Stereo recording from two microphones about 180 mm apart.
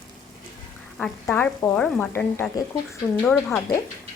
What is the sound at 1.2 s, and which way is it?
Speech, 10° left (ahead or behind).